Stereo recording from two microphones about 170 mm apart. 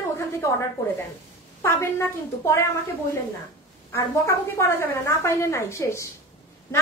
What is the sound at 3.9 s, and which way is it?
A woman's voice, 15° left (ahead or behind).